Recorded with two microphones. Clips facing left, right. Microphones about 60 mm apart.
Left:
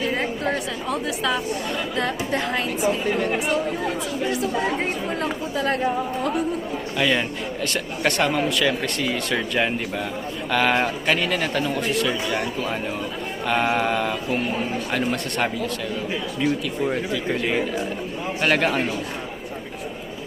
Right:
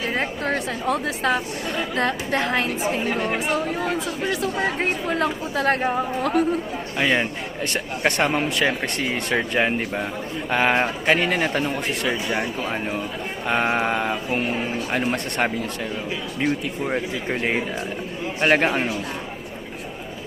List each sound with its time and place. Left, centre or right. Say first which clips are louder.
0.2 s a woman's voice: even; right
4.3 s a woman's voice: even; right
6.9 s a man's voice: right 1 dB; right
13.4 s mantra: even; right
14.9 s a man's voice: right 1 dB; right
18.3 s mantra: right 2 dB; right